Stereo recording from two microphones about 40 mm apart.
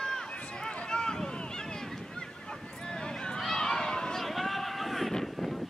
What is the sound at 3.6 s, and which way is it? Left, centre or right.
Run, centre.